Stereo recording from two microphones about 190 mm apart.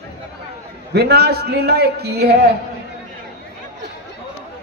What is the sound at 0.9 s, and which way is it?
A man's voice, 60° right (ahead or behind).